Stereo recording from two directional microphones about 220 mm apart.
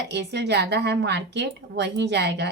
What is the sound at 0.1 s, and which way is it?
Speech, 50° right (ahead or behind).